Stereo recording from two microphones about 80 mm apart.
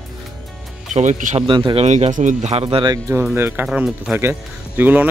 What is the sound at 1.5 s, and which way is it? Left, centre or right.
Speech, right.